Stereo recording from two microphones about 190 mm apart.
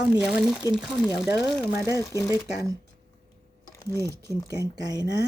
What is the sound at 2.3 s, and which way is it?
Speech, 20° right (ahead or behind).